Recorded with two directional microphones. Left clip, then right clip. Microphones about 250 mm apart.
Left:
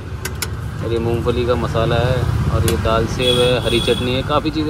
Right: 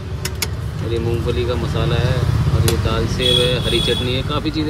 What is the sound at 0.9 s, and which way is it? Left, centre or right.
Speech, centre.